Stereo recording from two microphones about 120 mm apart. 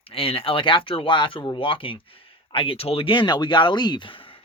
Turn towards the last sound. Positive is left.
turn(degrees=45)  # may be behind; listen again after turning